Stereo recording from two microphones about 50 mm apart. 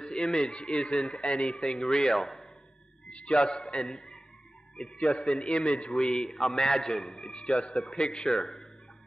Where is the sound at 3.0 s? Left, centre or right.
Left.